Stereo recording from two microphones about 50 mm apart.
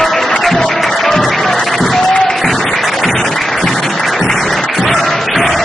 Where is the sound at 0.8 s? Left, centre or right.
Centre.